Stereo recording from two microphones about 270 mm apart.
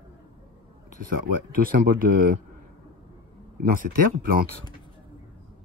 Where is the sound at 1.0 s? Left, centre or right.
Right.